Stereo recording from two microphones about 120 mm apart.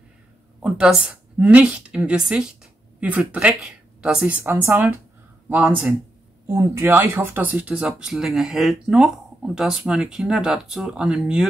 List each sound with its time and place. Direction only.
0.6 s a woman's voice: 5° right (ahead or behind)
4.4 s a woman's voice: 20° right (ahead or behind)